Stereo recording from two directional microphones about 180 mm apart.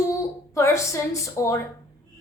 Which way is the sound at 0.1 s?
15° left (ahead or behind).